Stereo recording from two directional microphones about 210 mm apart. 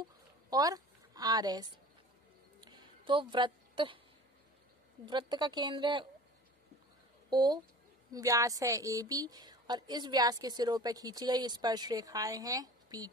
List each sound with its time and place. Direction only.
0.5 s a woman's voice: 20° right (ahead or behind)
2.6 s a sound: 20° right (ahead or behind)
5.0 s a woman's voice: 20° right (ahead or behind)
7.2 s a woman's voice: 20° right (ahead or behind)